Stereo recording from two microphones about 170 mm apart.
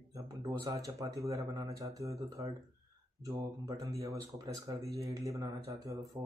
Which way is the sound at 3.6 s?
20° right (ahead or behind).